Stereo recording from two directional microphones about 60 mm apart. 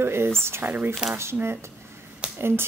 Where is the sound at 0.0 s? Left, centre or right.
Right.